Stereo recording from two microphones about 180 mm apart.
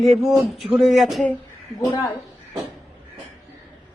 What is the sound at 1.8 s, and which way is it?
Speech, 25° left (ahead or behind).